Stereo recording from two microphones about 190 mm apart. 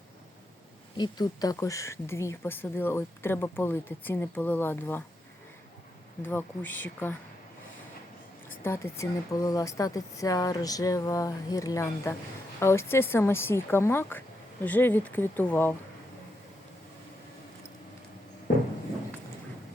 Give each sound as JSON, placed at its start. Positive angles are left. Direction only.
{"t": 0.9, "sound": "speech", "side_deg": 20}
{"t": 6.2, "sound": "speech", "side_deg": 10}
{"t": 8.4, "sound": "speech", "side_deg": 15}